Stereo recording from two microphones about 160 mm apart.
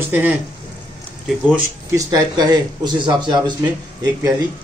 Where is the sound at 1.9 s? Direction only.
20° right (ahead or behind).